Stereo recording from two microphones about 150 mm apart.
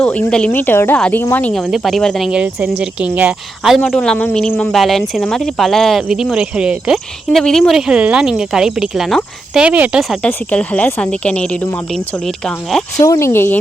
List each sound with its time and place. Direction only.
0.0 s speech: 10° left (ahead or behind)
3.8 s speech: 5° left (ahead or behind)
10.2 s speech: 10° left (ahead or behind)
13.0 s speech: 20° left (ahead or behind)